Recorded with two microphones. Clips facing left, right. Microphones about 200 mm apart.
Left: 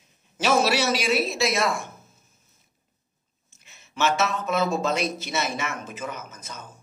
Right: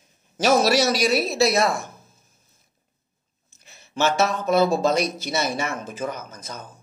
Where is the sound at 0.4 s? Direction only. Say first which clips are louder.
Right 4 dB; 40° right (ahead or behind).